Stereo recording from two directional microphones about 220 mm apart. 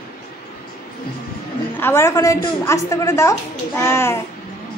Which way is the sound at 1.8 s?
10° left (ahead or behind).